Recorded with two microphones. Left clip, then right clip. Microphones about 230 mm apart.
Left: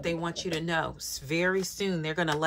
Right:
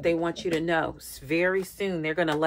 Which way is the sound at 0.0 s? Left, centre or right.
Centre.